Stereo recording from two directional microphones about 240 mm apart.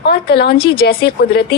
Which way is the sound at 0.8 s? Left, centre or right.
Left.